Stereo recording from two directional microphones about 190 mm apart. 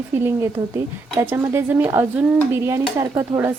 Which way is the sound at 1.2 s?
15° right (ahead or behind).